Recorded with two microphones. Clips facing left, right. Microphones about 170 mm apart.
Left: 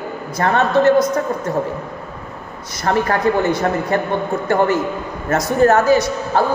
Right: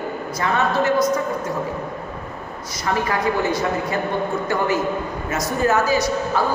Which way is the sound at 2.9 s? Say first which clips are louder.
Left 5 dB; 55° left (ahead or behind).